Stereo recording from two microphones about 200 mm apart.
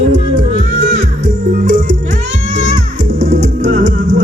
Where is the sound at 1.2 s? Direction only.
35° right (ahead or behind).